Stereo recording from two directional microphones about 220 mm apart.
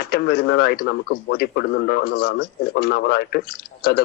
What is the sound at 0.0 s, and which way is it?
Speech, 45° left (ahead or behind).